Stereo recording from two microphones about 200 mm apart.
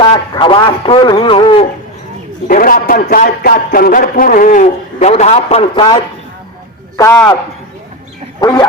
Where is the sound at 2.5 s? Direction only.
45° left (ahead or behind); by 6.0 s 25° left (ahead or behind).